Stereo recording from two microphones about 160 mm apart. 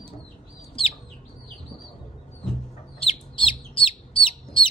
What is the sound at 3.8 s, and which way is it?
Bird, 35° left (ahead or behind).